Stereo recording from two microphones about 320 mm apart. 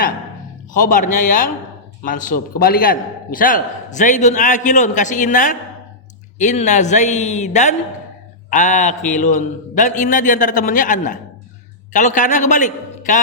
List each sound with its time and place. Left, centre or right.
0.7 s a man's voice: left